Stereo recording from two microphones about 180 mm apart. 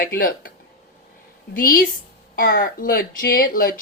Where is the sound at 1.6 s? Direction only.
55° left (ahead or behind).